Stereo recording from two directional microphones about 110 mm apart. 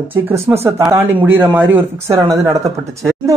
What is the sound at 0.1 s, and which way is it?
Speech, 25° right (ahead or behind).